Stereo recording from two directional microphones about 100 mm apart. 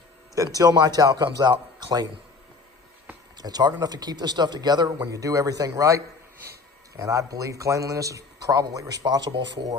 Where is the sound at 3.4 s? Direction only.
40° right (ahead or behind).